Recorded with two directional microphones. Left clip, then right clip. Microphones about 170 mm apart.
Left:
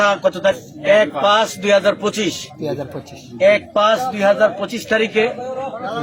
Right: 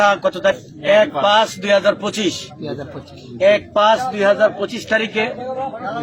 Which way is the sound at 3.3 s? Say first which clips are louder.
Even; 15° left (ahead or behind).